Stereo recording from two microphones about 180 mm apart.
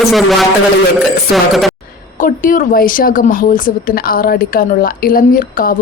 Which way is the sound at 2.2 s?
50° left (ahead or behind).